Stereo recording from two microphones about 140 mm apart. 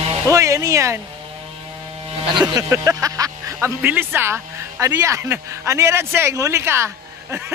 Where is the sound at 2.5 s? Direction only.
25° right (ahead or behind).